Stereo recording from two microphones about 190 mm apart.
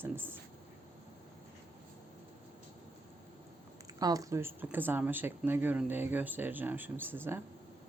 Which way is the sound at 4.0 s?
20° right (ahead or behind).